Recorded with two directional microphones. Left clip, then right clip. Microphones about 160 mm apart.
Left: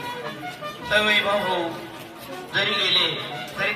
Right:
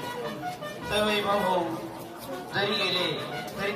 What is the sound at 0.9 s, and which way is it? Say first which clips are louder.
Speech: left 6 dB; 25° left (ahead or behind).